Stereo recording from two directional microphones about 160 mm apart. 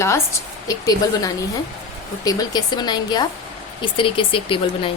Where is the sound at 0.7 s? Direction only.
20° left (ahead or behind).